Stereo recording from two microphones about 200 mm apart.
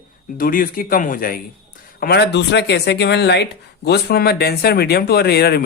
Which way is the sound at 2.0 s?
55° left (ahead or behind).